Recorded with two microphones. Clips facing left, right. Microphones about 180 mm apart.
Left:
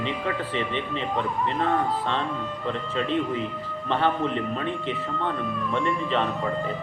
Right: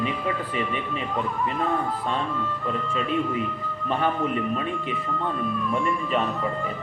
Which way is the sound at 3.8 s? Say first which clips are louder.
Left 1 dB; 10° right (ahead or behind).